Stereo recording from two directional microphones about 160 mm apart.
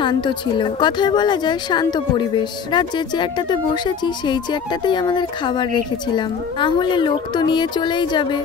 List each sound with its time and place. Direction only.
0.0 s a woman's voice: 30° left (ahead or behind)